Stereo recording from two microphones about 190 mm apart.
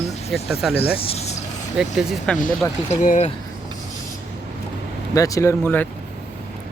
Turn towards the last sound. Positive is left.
turn(degrees=10)  # may be behind; listen again after turning